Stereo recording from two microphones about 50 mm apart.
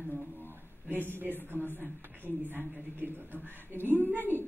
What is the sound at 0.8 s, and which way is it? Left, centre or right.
A woman's voice, right.